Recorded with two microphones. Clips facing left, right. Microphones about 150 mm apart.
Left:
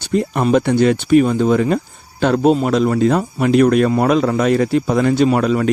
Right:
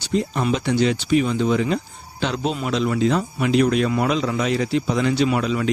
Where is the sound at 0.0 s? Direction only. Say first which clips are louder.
Left 5 dB; 55° left (ahead or behind).